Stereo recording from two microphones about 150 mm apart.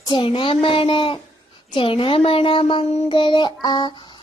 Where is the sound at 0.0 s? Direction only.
35° left (ahead or behind).